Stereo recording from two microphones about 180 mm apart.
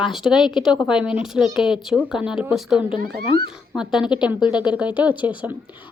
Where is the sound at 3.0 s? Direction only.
60° right (ahead or behind).